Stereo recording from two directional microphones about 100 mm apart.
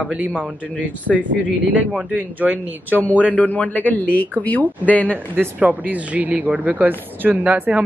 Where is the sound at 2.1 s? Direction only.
15° right (ahead or behind).